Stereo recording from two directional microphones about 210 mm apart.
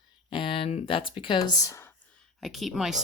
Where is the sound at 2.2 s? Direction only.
Centre (ahead or behind).